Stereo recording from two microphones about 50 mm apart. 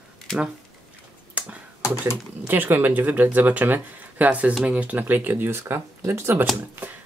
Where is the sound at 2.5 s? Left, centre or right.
Right.